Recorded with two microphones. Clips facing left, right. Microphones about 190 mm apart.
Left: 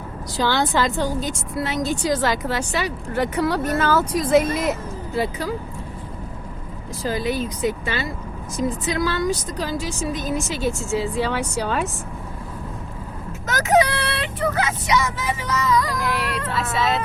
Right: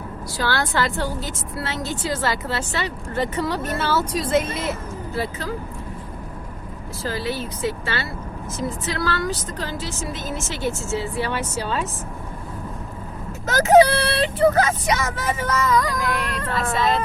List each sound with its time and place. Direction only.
0.3 s a woman's voice: 20° left (ahead or behind)
7.0 s a woman's voice: 20° left (ahead or behind)
13.5 s speech: 30° right (ahead or behind); by 15.9 s 50° right (ahead or behind)
16.0 s a sound: centre (ahead or behind)